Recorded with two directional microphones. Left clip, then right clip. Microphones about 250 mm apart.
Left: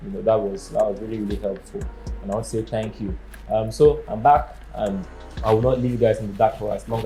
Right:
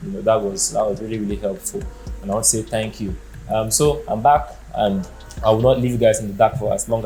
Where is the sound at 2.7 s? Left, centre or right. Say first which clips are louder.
Right 3 dB; right.